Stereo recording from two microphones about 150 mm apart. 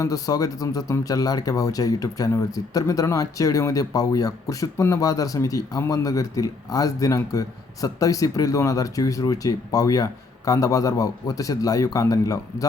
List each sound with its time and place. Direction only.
0.0 s speech: 25° left (ahead or behind)